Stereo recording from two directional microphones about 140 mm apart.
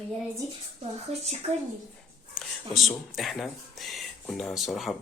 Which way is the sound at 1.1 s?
50° right (ahead or behind).